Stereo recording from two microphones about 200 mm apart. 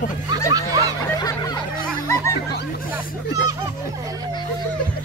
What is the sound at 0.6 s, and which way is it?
Snicker, 15° right (ahead or behind).